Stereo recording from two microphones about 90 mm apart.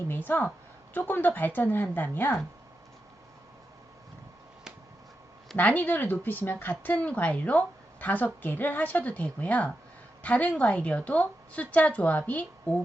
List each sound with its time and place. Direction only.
0.1 s a woman's voice: 20° left (ahead or behind)
5.5 s a woman's voice: 20° left (ahead or behind)